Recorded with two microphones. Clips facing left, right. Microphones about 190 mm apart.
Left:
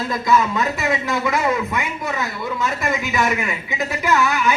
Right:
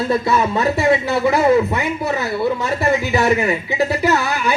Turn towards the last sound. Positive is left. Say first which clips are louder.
# right 1 dB
turn(degrees=-35)  # may be behind; listen again after turning